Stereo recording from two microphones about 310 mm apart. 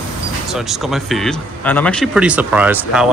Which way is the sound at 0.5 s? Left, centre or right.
Centre.